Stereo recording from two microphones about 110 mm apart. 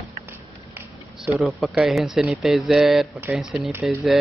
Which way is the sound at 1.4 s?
Centre (ahead or behind).